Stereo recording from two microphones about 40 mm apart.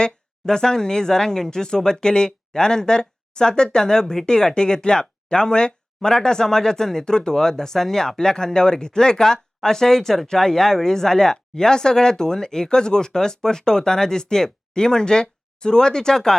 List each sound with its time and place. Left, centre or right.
0.0 s speech: centre
4.3 s speech: centre